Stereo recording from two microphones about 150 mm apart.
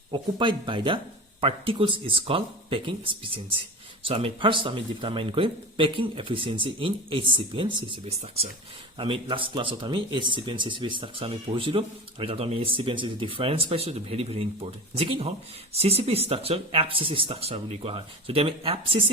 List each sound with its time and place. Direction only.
0.1 s speech: 35° right (ahead or behind)